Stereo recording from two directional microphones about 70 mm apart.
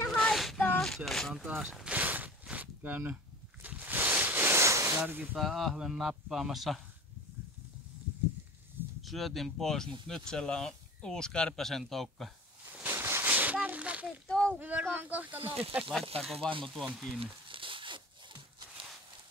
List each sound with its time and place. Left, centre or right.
0.1 s child singing: centre
0.7 s a sound: centre
1.6 s a sound: centre; by 5.0 s right
5.0 s speech: right
5.4 s speech: centre
9.0 s speech: centre
12.8 s a sound: right; by 14.1 s centre
14.2 s speech: centre
14.6 s speech: right
15.9 s speech: centre